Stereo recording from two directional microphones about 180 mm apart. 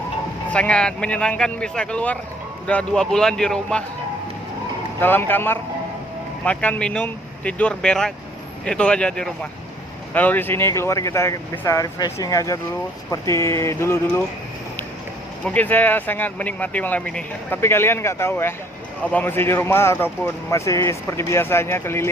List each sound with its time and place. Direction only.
0.5 s speech: 5° left (ahead or behind)
4.9 s speech: 10° left (ahead or behind)
15.4 s speech: 10° left (ahead or behind)